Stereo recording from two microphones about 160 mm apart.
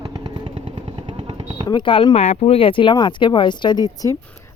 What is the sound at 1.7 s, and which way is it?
Speech, 30° left (ahead or behind).